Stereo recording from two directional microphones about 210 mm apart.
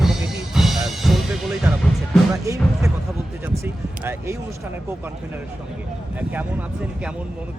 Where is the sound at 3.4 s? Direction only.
10° right (ahead or behind).